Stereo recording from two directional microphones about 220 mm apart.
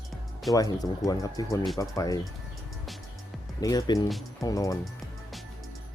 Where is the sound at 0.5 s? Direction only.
15° left (ahead or behind).